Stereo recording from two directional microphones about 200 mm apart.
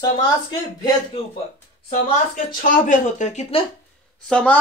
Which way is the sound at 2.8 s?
40° left (ahead or behind).